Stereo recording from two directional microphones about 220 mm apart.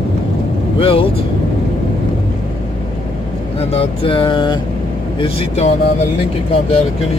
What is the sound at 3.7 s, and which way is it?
Speech, 25° left (ahead or behind).